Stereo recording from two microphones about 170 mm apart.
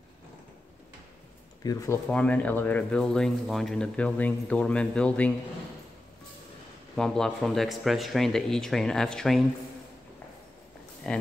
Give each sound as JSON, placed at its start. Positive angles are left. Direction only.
{"t": 1.6, "sound": "speech", "side_deg": 20}
{"t": 2.0, "sound": "speech", "side_deg": 10}
{"t": 7.0, "sound": "speech", "side_deg": 0}
{"t": 11.1, "sound": "speech", "side_deg": 5}